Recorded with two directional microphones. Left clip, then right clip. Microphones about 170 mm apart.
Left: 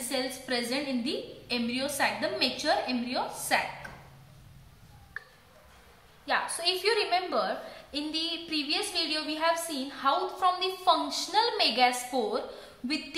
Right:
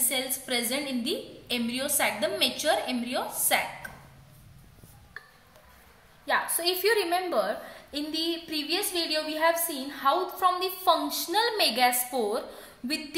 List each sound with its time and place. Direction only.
0.5 s a woman's voice: 45° right (ahead or behind)
6.2 s a woman's voice: 45° right (ahead or behind)